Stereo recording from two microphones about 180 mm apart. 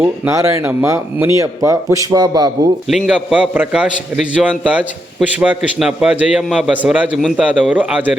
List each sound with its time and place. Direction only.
0.0 s a man's voice: 15° right (ahead or behind)
3.1 s a man's voice: 5° right (ahead or behind)